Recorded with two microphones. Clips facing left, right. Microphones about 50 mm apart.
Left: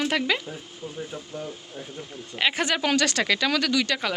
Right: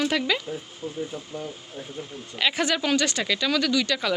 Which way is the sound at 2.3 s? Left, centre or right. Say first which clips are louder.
Even; left.